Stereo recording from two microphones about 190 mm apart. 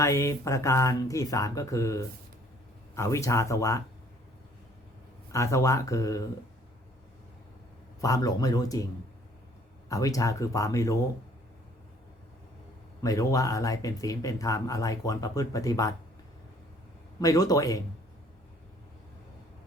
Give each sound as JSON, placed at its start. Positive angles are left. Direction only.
{"t": 0.0, "sound": "speech", "side_deg": 15}
{"t": 5.3, "sound": "speech", "side_deg": 15}
{"t": 8.0, "sound": "speech", "side_deg": 20}
{"t": 9.9, "sound": "speech", "side_deg": 20}
{"t": 13.0, "sound": "speech", "side_deg": 20}
{"t": 17.2, "sound": "speech", "side_deg": 20}